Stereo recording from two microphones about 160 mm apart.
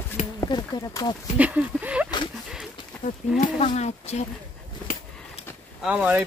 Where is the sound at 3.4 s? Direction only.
50° left (ahead or behind).